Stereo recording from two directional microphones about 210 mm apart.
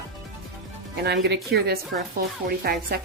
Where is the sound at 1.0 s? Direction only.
55° right (ahead or behind).